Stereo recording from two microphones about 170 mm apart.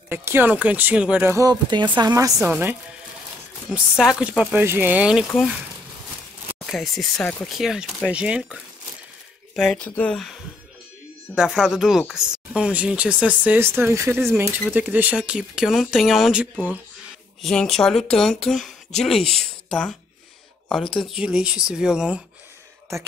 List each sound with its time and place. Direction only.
0.1 s speech: 15° right (ahead or behind)
2.4 s speech: 10° right (ahead or behind)
4.0 s speech: 5° right (ahead or behind)
6.6 s speech: centre (ahead or behind)
9.6 s speech: centre (ahead or behind)
11.3 s speech: 5° right (ahead or behind)
21.0 s speech: 5° right (ahead or behind)